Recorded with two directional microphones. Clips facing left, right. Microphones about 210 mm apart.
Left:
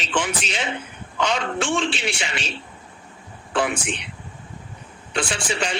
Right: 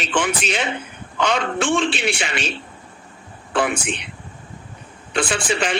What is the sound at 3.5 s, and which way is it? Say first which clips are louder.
Speech: right 2 dB; 55° right (ahead or behind).